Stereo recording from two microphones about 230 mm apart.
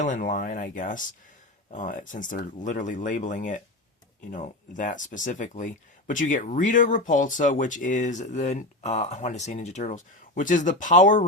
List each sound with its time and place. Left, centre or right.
0.0 s speech: left